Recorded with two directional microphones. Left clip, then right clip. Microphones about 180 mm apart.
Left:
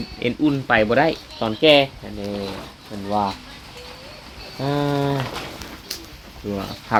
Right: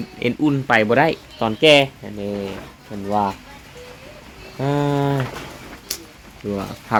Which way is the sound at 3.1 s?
30° right (ahead or behind).